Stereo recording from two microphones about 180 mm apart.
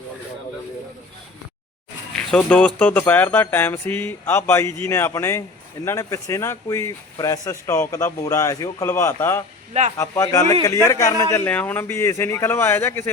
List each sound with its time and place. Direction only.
2.1 s speech: 5° left (ahead or behind)